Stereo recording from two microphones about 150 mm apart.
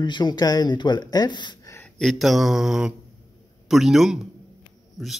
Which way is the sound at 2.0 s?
Centre (ahead or behind).